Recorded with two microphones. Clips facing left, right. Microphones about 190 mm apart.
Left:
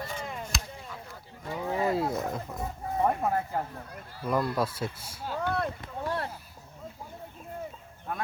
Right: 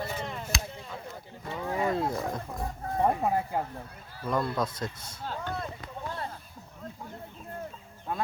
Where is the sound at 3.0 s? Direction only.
15° right (ahead or behind).